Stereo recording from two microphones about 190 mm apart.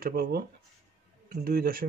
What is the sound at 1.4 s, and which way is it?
Speech, 50° right (ahead or behind).